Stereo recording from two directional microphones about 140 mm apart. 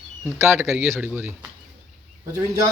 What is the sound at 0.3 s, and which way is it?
Speech, 20° right (ahead or behind).